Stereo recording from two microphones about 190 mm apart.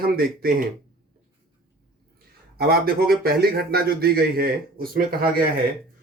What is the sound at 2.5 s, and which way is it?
A man's voice, 55° right (ahead or behind).